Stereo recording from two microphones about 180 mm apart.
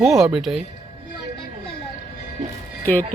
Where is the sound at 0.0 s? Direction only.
5° right (ahead or behind).